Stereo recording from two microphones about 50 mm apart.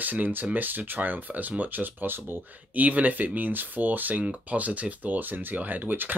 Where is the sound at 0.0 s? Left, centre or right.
Right.